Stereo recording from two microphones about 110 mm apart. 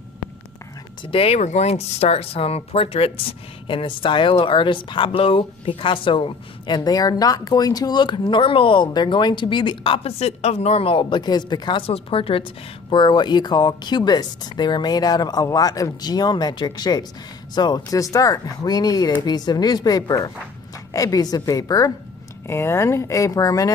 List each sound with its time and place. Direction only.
1.0 s speech: 60° left (ahead or behind)
3.6 s speech: 50° left (ahead or behind)
10.1 s speech: 70° left (ahead or behind); by 12.4 s 55° left (ahead or behind)
12.9 s speech: 45° left (ahead or behind)